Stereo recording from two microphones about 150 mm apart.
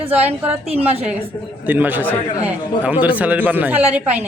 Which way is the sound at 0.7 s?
40° right (ahead or behind).